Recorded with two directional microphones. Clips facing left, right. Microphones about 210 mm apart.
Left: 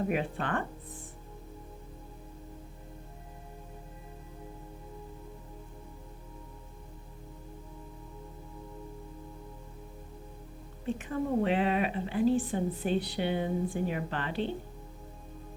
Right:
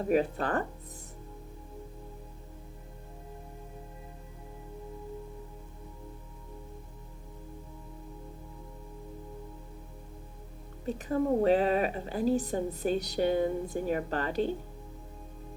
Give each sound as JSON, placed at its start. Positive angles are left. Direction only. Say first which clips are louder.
{"t": 0.1, "sound": "a woman's voice", "louder": "right 4 dB", "side_deg": -40}
{"t": 10.8, "sound": "a woman's voice", "louder": "right 3 dB", "side_deg": -40}